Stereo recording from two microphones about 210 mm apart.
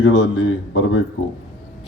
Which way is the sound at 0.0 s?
60° left (ahead or behind).